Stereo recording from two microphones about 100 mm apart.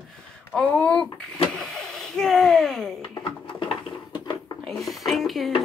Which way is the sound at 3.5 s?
55° left (ahead or behind).